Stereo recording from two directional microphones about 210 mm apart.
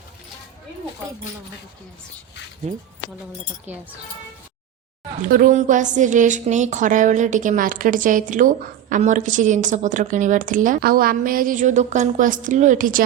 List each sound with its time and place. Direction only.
3.7 s speech: 10° right (ahead or behind)
5.3 s a woman's voice: 40° right (ahead or behind)